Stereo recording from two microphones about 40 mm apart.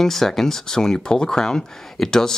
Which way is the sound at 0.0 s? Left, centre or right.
Centre.